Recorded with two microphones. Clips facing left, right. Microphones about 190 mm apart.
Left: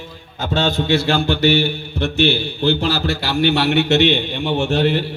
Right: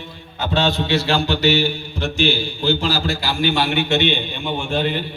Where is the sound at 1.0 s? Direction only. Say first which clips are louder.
Left 2 dB; 50° left (ahead or behind).